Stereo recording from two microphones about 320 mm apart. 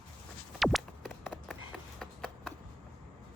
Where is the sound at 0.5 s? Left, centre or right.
Centre.